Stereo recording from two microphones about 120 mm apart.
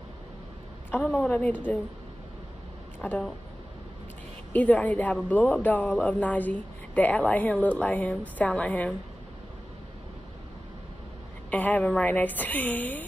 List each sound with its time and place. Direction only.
0.9 s speech: 10° left (ahead or behind)
3.0 s speech: 10° left (ahead or behind)
4.5 s speech: 10° left (ahead or behind)
11.5 s speech: 10° left (ahead or behind)